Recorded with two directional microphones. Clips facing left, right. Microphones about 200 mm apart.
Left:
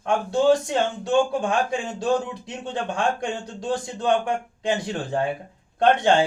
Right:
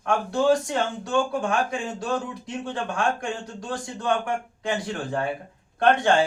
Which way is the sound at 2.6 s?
20° left (ahead or behind).